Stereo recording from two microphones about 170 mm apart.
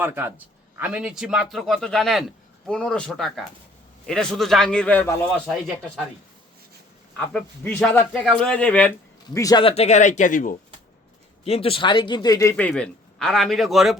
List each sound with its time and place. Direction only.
0.0 s a man's voice: 10° right (ahead or behind); by 5.1 s 10° left (ahead or behind)
7.3 s a man's voice: 10° left (ahead or behind)
9.3 s speech: 20° left (ahead or behind)
9.6 s speech: 40° left (ahead or behind)
11.4 s speech: 35° left (ahead or behind)
12.5 s a man's voice: 5° left (ahead or behind)